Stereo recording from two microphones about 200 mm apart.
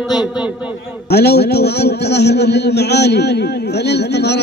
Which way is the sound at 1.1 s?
55° left (ahead or behind).